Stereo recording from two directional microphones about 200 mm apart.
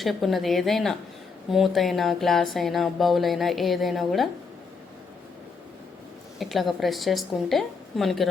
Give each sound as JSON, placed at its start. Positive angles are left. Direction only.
{"t": 0.0, "sound": "speech", "side_deg": 0}
{"t": 6.4, "sound": "speech", "side_deg": 0}